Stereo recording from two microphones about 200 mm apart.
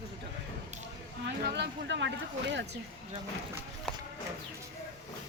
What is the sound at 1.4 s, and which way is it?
Speech, 60° right (ahead or behind).